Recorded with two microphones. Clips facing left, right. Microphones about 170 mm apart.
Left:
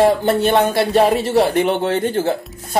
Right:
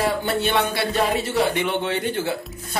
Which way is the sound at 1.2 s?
35° left (ahead or behind).